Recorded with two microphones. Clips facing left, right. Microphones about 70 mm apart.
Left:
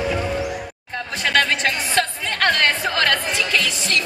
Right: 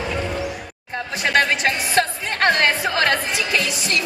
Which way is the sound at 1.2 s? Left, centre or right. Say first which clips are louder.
Right 1 dB; centre.